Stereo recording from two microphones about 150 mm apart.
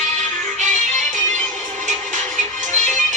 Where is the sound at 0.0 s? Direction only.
55° right (ahead or behind).